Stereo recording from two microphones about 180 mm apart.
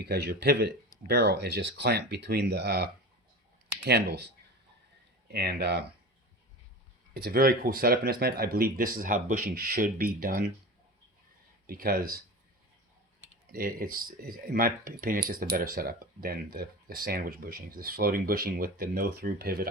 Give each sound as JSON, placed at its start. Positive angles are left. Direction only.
{"t": 0.0, "sound": "speech", "side_deg": -65}
{"t": 5.3, "sound": "speech", "side_deg": -60}
{"t": 7.1, "sound": "speech", "side_deg": -60}
{"t": 11.6, "sound": "speech", "side_deg": -55}
{"t": 13.5, "sound": "speech", "side_deg": -55}